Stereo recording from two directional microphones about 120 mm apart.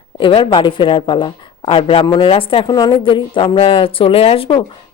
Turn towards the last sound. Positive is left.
turn(degrees=50)  # may be behind; listen again after turning